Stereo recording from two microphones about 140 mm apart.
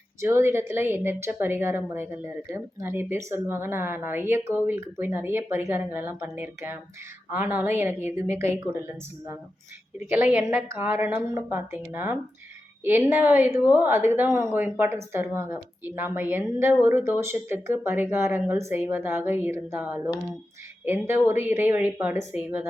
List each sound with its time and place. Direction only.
0.2 s a woman's voice: 20° right (ahead or behind)
10.1 s a woman's voice: 15° right (ahead or behind)
21.1 s a woman's voice: 15° right (ahead or behind)